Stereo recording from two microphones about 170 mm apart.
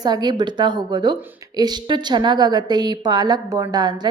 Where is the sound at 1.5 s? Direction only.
25° right (ahead or behind).